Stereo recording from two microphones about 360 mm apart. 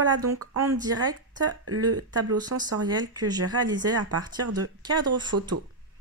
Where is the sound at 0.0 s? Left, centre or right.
Right.